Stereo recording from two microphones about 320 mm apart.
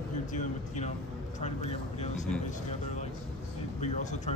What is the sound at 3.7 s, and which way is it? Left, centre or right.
Speech, left.